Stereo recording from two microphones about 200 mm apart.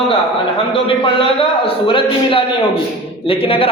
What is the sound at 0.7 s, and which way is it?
A man's voice, 25° left (ahead or behind).